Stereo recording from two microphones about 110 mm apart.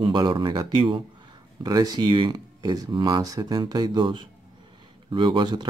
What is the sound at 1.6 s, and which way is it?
Speech, 35° right (ahead or behind).